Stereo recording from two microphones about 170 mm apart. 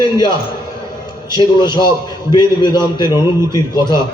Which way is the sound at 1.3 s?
25° left (ahead or behind).